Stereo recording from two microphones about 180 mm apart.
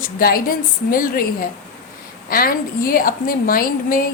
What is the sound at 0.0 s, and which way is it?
A woman's voice, 55° left (ahead or behind).